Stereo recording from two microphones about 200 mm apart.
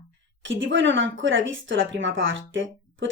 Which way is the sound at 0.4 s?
70° right (ahead or behind).